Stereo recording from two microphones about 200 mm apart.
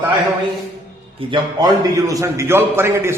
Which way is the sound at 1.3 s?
20° right (ahead or behind).